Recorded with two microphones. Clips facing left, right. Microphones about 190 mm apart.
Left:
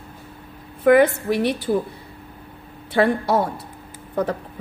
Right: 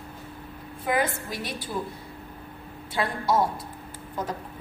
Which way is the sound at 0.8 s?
65° left (ahead or behind).